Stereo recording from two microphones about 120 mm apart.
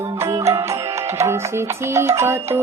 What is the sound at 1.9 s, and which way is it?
Music, 25° right (ahead or behind).